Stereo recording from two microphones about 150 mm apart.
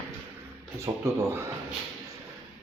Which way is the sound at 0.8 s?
15° right (ahead or behind).